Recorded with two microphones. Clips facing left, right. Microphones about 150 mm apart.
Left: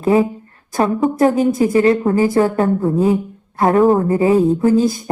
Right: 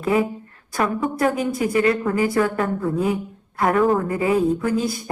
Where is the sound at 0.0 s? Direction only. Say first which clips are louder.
Left 6 dB; 30° left (ahead or behind).